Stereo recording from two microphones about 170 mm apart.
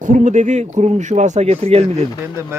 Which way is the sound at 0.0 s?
50° right (ahead or behind).